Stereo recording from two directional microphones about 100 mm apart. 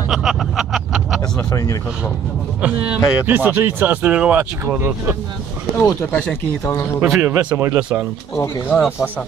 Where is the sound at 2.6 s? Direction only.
10° right (ahead or behind).